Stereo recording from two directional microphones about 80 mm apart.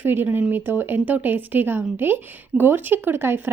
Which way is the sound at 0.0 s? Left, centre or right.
Right.